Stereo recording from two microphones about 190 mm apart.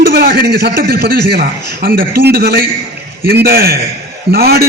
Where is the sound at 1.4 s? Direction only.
50° right (ahead or behind).